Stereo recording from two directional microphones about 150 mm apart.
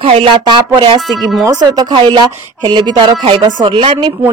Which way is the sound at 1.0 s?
Centre (ahead or behind).